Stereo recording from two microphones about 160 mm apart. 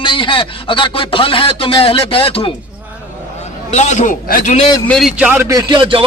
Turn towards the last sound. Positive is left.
turn(degrees=-35)  # may be behind; listen again after turning